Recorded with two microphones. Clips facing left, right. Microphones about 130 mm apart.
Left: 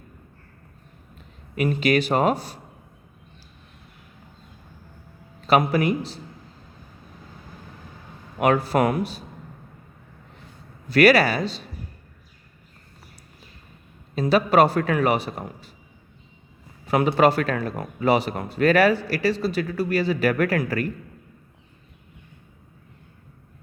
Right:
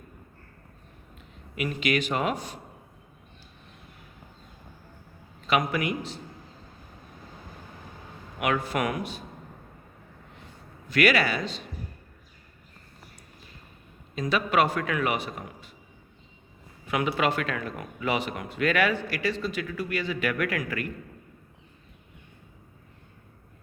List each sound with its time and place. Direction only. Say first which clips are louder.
1.5 s speech: left 6 dB; 35° left (ahead or behind)
5.5 s speech: left 6 dB; 35° left (ahead or behind)
8.4 s speech: left 7 dB; 35° left (ahead or behind)
10.8 s speech: left 7 dB; 35° left (ahead or behind)
14.2 s speech: left 7 dB; 35° left (ahead or behind)
16.8 s speech: left 8 dB; 35° left (ahead or behind)